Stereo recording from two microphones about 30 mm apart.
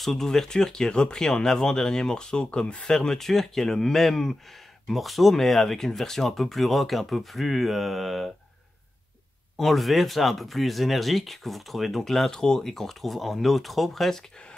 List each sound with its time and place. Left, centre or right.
0.0 s speech: centre; by 2.8 s left
2.8 s speech: left
4.8 s speech: centre
9.6 s speech: centre
12.3 s speech: left; by 14.2 s centre